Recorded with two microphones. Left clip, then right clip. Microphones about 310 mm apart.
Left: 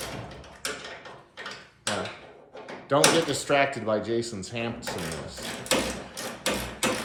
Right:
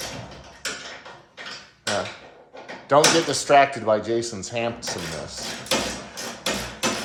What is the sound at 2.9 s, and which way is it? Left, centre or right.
Speech, centre.